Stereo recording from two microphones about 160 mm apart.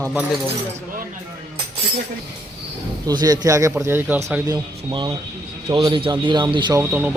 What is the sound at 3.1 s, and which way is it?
A man's voice, 25° right (ahead or behind).